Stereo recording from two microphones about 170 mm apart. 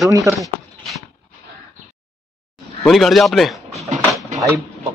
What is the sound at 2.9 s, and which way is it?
Speech, centre (ahead or behind).